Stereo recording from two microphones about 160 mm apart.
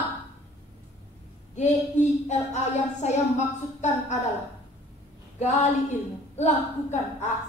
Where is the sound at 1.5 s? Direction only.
45° left (ahead or behind).